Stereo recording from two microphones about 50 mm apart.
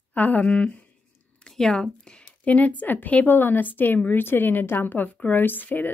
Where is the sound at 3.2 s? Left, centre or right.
Left.